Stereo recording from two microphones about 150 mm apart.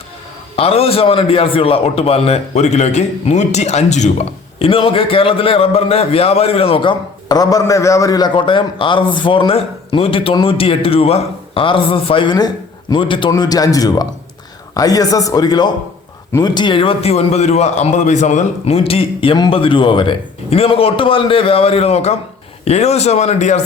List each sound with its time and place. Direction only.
0.5 s a man's voice: 40° left (ahead or behind)
7.3 s a man's voice: 25° left (ahead or behind); by 23.6 s 50° left (ahead or behind)